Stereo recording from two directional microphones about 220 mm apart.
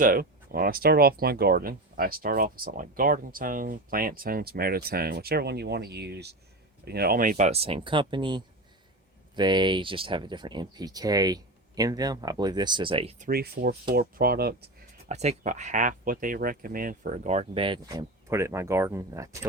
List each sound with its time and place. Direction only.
0.0 s speech: 40° right (ahead or behind)
15.1 s speech: 30° right (ahead or behind); by 19.5 s 15° right (ahead or behind)